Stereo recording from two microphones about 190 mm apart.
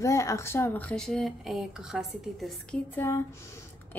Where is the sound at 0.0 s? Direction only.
15° left (ahead or behind); by 2.8 s centre (ahead or behind).